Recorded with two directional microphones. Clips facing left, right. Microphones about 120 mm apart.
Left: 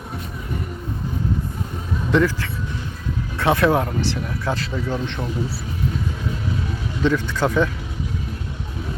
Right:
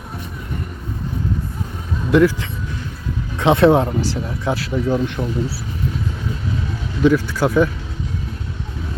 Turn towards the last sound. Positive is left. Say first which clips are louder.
# right 3 dB
turn(degrees=-10)  # may be behind; listen again after turning